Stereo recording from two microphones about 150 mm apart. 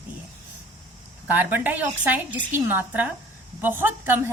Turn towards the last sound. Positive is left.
turn(degrees=-15)  # may be behind; listen again after turning